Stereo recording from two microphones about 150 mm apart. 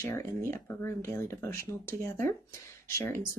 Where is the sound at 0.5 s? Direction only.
15° left (ahead or behind).